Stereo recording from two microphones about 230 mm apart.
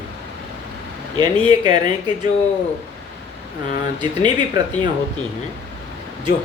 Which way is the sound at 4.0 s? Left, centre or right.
Centre.